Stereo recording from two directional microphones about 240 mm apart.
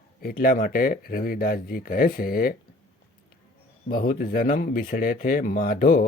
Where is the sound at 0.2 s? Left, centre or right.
Left.